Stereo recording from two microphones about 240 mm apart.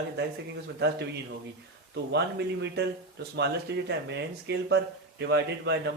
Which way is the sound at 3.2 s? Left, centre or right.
Right.